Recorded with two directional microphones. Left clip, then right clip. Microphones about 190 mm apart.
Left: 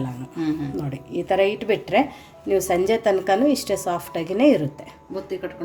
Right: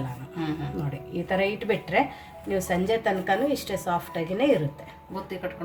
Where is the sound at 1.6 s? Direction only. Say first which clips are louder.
Left 4 dB; 50° left (ahead or behind).